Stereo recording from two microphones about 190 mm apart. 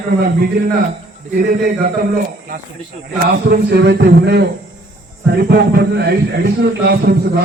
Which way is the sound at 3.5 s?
60° right (ahead or behind).